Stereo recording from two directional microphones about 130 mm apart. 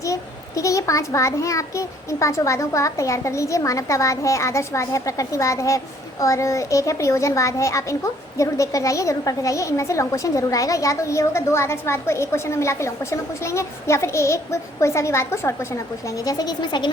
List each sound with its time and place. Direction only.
0.0 s a child's voice: 25° left (ahead or behind)